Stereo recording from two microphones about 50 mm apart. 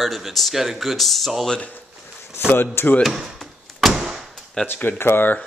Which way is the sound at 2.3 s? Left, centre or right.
Left.